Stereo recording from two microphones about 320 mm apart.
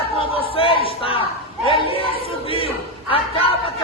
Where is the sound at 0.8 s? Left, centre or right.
Centre.